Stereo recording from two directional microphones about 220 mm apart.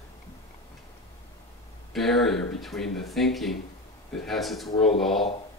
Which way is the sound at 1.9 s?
Centre (ahead or behind).